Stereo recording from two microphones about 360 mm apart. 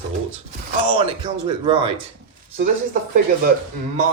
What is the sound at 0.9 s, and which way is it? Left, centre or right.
Speech, centre.